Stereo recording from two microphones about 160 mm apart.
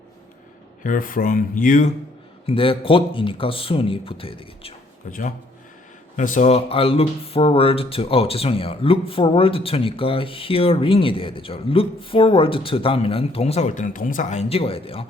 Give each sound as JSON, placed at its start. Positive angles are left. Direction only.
{"t": 0.9, "sound": "speech", "side_deg": 60}
{"t": 2.5, "sound": "speech", "side_deg": 35}
{"t": 6.1, "sound": "speech", "side_deg": 50}